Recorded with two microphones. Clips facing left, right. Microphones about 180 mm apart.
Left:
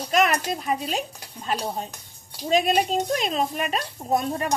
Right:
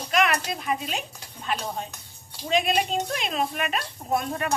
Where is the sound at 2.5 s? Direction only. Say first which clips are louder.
Left 3 dB; 40° left (ahead or behind).